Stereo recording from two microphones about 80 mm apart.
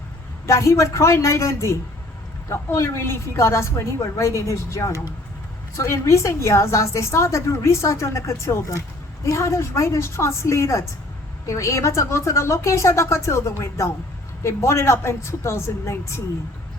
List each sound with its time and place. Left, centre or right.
0.4 s a woman's voice: left